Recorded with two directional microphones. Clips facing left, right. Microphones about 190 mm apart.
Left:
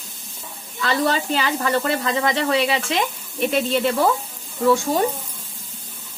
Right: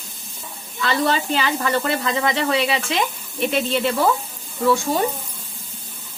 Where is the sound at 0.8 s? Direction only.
40° left (ahead or behind).